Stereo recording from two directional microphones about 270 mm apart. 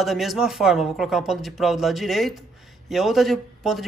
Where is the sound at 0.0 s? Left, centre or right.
Centre.